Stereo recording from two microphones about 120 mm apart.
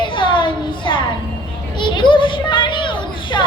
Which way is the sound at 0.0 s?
45° left (ahead or behind).